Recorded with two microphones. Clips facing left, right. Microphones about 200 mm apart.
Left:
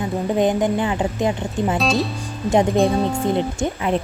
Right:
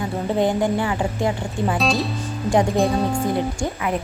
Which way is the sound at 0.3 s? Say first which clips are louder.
Left 1 dB; 20° left (ahead or behind).